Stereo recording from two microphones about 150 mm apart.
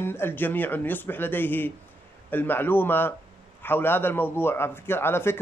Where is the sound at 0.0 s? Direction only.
15° left (ahead or behind).